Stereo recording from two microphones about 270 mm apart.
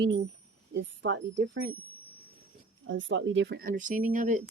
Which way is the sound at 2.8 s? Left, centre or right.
Right.